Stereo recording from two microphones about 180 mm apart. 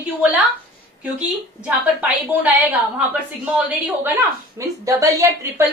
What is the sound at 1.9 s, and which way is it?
A woman's voice, 10° right (ahead or behind).